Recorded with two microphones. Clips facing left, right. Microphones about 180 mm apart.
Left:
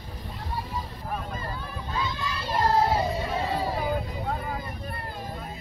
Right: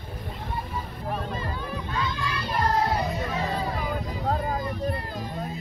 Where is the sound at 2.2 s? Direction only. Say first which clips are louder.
Left 2 dB; 25° left (ahead or behind).